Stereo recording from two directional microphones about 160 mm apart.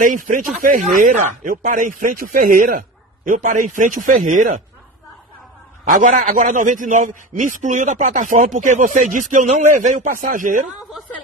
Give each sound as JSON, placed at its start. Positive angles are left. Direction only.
{"t": 0.0, "sound": "a man's voice", "side_deg": -55}
{"t": 5.9, "sound": "a man's voice", "side_deg": -55}